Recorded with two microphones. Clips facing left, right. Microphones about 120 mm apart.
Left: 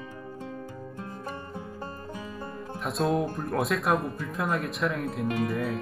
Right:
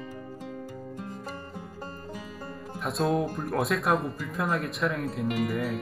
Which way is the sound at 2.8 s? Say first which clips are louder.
Even; centre (ahead or behind).